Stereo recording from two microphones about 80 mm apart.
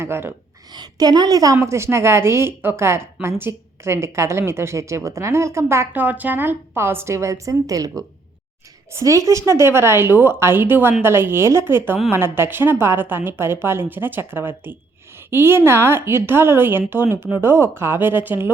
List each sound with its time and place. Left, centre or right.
0.0 s speech: right
0.7 s a woman's voice: right
1.5 s a woman's voice: right
5.9 s a woman's voice: right